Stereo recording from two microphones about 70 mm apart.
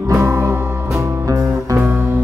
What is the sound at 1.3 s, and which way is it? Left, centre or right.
Music, right.